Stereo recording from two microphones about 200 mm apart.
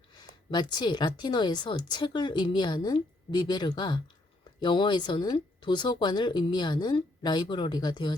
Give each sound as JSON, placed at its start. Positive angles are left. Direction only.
{"t": 0.1, "sound": "speech", "side_deg": 20}